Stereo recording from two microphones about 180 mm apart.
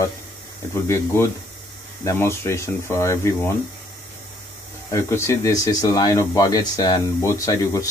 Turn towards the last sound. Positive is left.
turn(degrees=20)  # may be behind; listen again after turning